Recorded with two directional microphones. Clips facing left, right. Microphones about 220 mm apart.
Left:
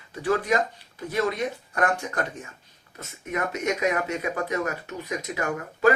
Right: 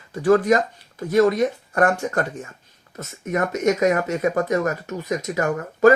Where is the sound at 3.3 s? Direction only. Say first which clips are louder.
Right 7 dB; 40° right (ahead or behind).